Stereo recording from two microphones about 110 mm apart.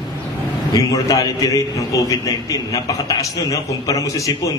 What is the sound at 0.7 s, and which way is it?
A man's voice, 35° left (ahead or behind).